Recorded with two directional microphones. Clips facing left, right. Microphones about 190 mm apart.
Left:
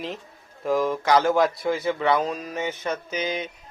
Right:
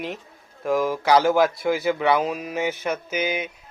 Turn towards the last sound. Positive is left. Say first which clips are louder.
# right 2 dB
turn(degrees=-5)  # may be behind; listen again after turning